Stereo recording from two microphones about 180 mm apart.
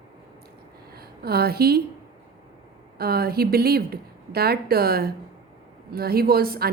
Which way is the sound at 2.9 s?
60° right (ahead or behind).